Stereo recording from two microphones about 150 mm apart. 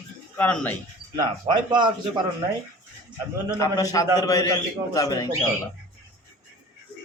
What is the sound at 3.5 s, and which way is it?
A man's voice, 25° left (ahead or behind).